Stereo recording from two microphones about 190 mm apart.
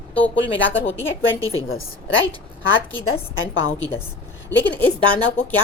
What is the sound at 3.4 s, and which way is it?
Speech, 90° left.